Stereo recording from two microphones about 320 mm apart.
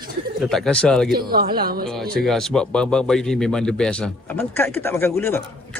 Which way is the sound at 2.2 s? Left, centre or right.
Centre.